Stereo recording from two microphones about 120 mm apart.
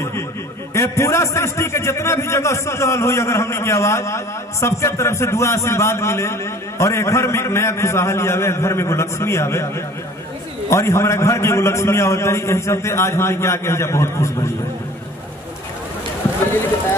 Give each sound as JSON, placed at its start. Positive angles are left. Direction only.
{"t": 0.7, "sound": "a man's voice", "side_deg": 25}